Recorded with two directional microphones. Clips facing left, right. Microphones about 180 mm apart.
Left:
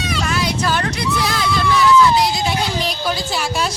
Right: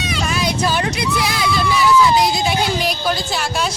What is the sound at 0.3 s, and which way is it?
Hubbub, 20° right (ahead or behind).